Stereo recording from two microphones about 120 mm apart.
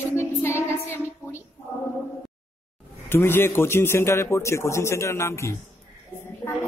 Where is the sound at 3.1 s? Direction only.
20° left (ahead or behind).